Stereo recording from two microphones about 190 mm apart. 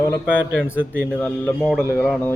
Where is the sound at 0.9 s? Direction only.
10° left (ahead or behind).